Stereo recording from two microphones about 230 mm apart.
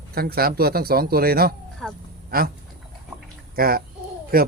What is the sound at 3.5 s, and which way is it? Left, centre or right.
Speech, right.